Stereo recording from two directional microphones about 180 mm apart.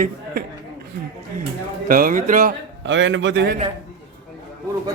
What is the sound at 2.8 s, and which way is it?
Speech, 90° right.